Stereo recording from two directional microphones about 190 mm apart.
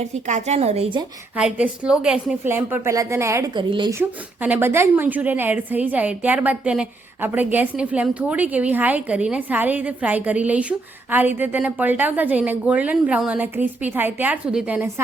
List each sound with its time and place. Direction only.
0.0 s a woman's voice: 35° right (ahead or behind)
1.4 s a woman's voice: 5° right (ahead or behind); by 3.9 s 25° right (ahead or behind)
3.9 s a woman's voice: 10° right (ahead or behind)